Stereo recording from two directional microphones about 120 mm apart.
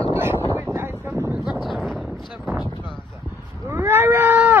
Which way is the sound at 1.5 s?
Centre (ahead or behind).